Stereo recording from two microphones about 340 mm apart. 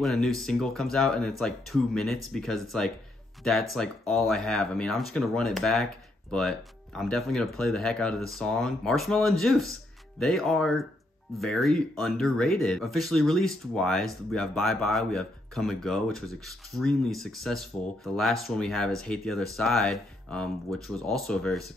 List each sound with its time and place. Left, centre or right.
0.0 s speech: centre